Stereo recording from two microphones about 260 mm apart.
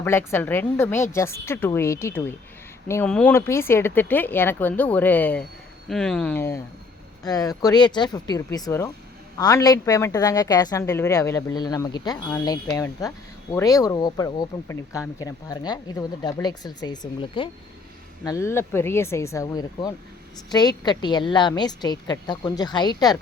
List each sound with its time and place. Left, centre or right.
0.0 s speech: centre